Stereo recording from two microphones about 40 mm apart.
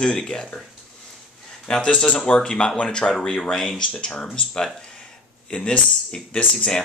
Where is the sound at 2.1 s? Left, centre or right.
Left.